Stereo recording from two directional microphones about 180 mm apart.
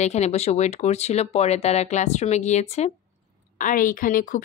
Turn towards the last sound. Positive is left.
turn(degrees=50)  # may be behind; listen again after turning